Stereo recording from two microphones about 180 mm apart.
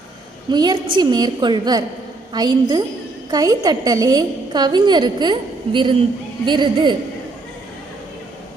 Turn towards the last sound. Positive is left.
turn(degrees=-25)  # may be behind; listen again after turning